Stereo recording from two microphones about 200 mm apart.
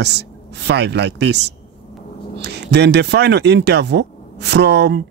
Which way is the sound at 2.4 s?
55° right (ahead or behind).